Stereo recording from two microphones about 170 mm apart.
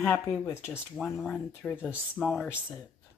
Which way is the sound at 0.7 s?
Centre (ahead or behind).